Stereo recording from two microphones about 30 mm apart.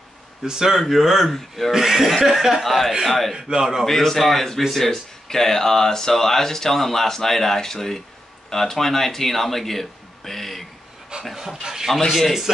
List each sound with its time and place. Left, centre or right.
0.4 s speech: centre
2.6 s speech: centre
3.3 s a man's voice: right
3.8 s speech: centre
11.1 s dog: right
11.6 s a sound: centre
12.1 s speech: centre